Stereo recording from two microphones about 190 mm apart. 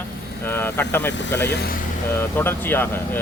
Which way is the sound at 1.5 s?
50° left (ahead or behind).